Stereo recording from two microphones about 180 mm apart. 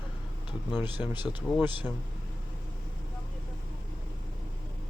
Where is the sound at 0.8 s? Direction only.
25° left (ahead or behind).